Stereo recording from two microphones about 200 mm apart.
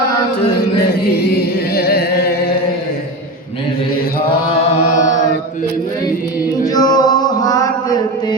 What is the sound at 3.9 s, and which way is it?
Mantra, 45° left (ahead or behind).